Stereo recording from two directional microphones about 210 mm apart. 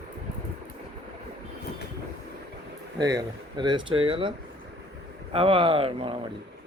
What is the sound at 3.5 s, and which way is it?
Speech, 20° right (ahead or behind).